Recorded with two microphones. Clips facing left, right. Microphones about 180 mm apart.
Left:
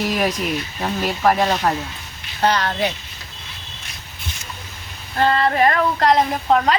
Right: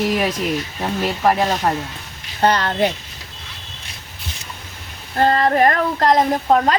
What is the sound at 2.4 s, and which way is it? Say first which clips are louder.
Speech: right 2 dB; 55° right (ahead or behind).